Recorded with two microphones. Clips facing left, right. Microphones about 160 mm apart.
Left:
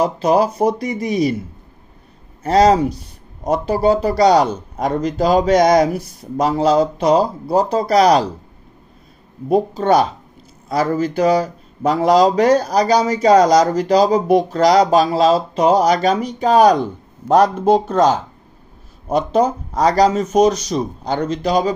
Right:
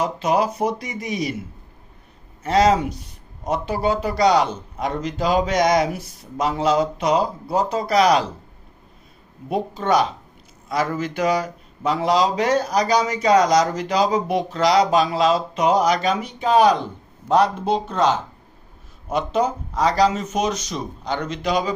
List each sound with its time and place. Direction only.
0.0 s speech: 35° left (ahead or behind)
2.4 s speech: 35° left (ahead or behind)
9.5 s speech: 40° left (ahead or behind)